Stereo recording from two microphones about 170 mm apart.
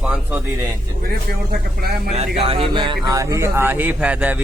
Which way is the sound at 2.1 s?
35° right (ahead or behind).